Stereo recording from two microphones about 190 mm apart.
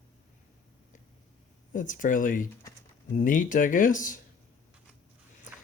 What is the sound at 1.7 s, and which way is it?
Speech, 45° left (ahead or behind).